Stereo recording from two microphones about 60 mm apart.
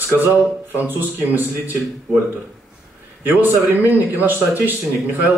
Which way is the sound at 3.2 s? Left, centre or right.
Right.